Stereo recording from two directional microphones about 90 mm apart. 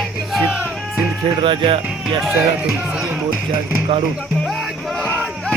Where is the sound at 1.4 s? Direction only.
65° right (ahead or behind).